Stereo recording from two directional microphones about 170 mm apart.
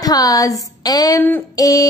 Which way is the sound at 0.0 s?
20° left (ahead or behind).